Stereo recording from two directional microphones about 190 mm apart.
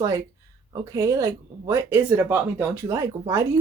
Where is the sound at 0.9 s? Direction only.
15° right (ahead or behind).